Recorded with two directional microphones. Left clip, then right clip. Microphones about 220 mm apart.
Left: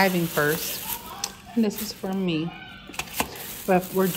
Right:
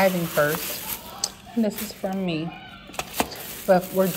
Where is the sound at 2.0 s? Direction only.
45° left (ahead or behind).